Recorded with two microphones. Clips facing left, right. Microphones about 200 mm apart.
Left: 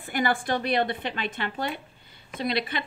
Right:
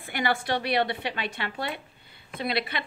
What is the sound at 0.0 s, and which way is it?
Speech, 50° left (ahead or behind).